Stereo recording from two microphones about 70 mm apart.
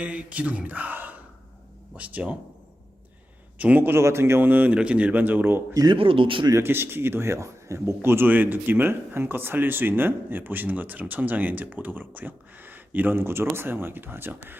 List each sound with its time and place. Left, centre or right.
0.0 s speech: centre
3.6 s speech: right
4.0 s speech: right
5.7 s speech: right
6.7 s speech: right